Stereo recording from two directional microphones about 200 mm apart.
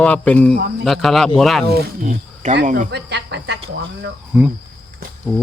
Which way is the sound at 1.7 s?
45° right (ahead or behind).